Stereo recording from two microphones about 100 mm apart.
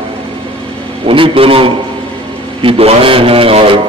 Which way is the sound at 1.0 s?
60° right (ahead or behind).